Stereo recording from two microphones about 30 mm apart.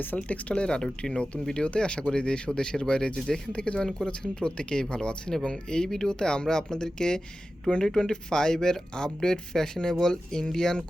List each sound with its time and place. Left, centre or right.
0.2 s speech: left
0.8 s speech: left
5.8 s speech: centre
6.1 s speech: left